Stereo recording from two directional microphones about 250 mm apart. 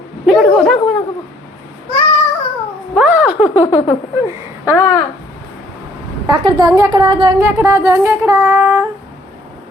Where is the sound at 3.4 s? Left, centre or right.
Centre.